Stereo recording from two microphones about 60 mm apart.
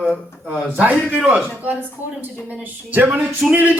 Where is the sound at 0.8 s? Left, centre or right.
Right.